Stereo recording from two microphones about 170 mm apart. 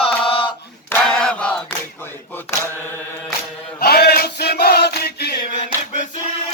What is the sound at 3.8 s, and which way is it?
Chant, 65° left (ahead or behind).